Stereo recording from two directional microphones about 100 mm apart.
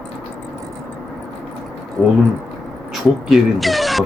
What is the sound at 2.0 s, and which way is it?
Speech, 10° left (ahead or behind).